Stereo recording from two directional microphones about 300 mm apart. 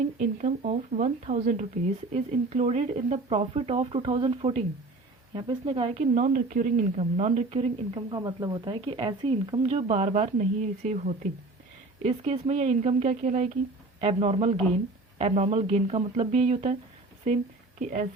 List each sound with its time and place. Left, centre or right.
0.2 s a woman's voice: right